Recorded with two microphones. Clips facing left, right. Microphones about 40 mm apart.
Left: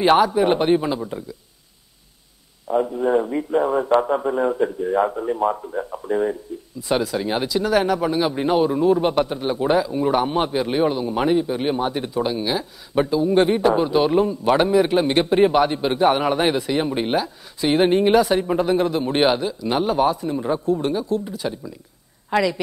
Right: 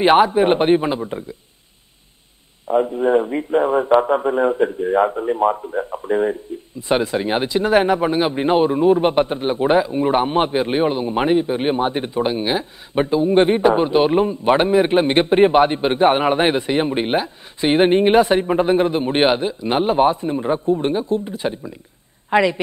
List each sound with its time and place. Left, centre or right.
0.0 s a man's voice: right
2.7 s a man's voice: right